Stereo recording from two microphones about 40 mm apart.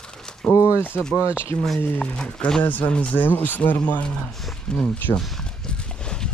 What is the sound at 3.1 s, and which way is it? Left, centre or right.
Speech, left.